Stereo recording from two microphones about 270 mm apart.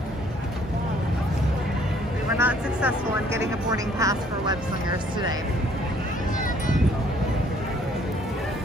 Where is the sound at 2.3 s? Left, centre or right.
Centre.